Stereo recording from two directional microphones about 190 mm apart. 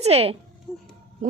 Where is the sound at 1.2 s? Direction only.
45° right (ahead or behind).